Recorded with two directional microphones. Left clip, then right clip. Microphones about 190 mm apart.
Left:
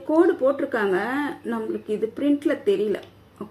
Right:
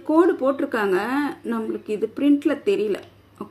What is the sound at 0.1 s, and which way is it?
A woman's voice, 35° right (ahead or behind).